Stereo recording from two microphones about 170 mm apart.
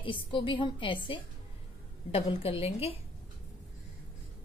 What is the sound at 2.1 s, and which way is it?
Speech, 35° left (ahead or behind).